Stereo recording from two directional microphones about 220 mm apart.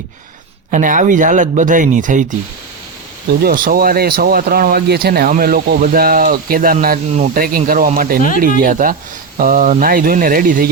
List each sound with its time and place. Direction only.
0.7 s speech: 35° right (ahead or behind)
3.4 s speech: 40° right (ahead or behind)